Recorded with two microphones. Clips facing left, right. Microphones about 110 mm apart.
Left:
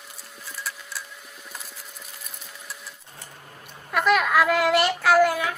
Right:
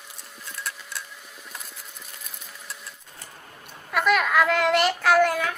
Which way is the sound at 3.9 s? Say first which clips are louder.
Left 1 dB; centre (ahead or behind).